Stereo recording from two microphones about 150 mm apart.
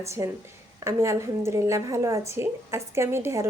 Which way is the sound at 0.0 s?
20° right (ahead or behind).